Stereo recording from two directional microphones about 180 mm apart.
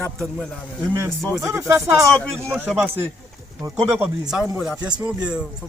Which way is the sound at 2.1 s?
5° left (ahead or behind).